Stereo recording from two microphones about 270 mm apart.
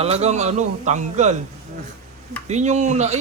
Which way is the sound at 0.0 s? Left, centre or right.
Right.